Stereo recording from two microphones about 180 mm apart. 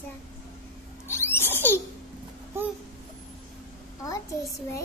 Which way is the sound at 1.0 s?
15° left (ahead or behind).